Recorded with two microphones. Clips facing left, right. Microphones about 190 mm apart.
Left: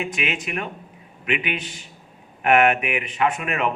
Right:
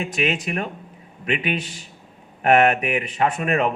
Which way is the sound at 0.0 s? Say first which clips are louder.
Right 3 dB; 35° right (ahead or behind).